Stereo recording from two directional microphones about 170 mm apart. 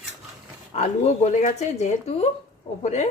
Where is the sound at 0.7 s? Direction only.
45° left (ahead or behind).